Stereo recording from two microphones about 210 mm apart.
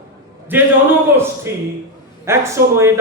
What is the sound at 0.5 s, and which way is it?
A man's voice, 10° right (ahead or behind).